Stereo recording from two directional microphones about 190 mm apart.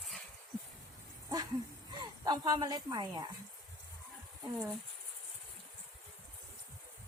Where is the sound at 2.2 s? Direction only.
20° right (ahead or behind).